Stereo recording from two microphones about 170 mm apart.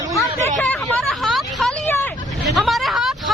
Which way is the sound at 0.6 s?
Centre (ahead or behind).